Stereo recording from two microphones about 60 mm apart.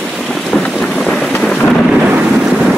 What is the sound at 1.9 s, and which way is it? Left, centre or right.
Boat, centre.